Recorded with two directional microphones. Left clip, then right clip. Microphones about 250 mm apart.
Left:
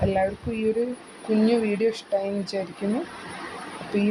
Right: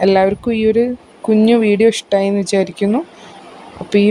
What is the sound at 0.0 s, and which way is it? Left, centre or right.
Speech, right.